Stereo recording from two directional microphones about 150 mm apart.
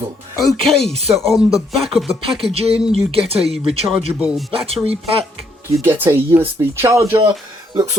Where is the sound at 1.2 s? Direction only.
Centre (ahead or behind).